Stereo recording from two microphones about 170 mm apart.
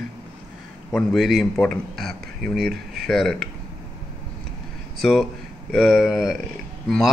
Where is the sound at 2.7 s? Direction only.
60° right (ahead or behind).